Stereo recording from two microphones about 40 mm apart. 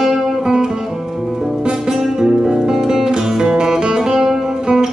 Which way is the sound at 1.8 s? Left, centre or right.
Centre.